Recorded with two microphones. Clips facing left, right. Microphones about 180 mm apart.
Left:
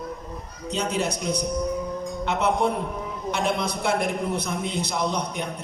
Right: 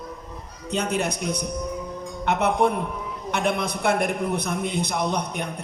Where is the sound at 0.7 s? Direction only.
60° right (ahead or behind).